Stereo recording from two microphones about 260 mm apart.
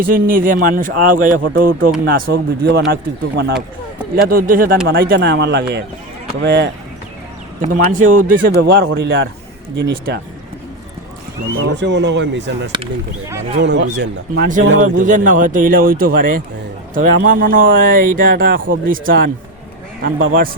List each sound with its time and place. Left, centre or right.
0.0 s a man's voice: right
7.6 s a man's voice: right
11.6 s speech: right
12.7 s speech: centre
13.6 s a man's voice: right